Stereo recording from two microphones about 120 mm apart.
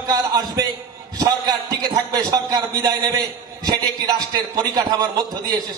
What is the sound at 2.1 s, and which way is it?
A man's voice, 30° right (ahead or behind).